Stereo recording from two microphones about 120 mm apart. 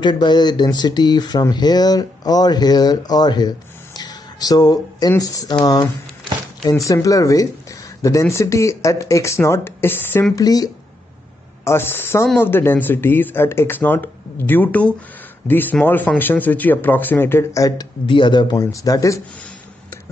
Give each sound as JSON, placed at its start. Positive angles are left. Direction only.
{"t": 0.0, "sound": "speech", "side_deg": 40}
{"t": 10.3, "sound": "speech", "side_deg": 30}
{"t": 11.6, "sound": "speech", "side_deg": 20}
{"t": 18.0, "sound": "speech", "side_deg": 45}